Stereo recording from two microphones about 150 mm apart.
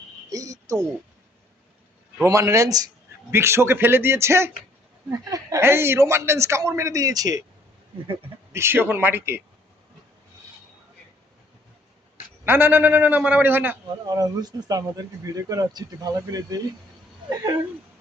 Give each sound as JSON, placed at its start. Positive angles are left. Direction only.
{"t": 0.3, "sound": "a sound", "side_deg": -25}
{"t": 2.2, "sound": "a man's voice", "side_deg": -20}
{"t": 8.5, "sound": "a man's voice", "side_deg": -15}
{"t": 12.5, "sound": "a man's voice", "side_deg": -15}
{"t": 14.1, "sound": "speech", "side_deg": -25}